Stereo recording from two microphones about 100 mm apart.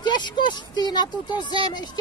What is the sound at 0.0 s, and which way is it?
A child's voice, 50° left (ahead or behind).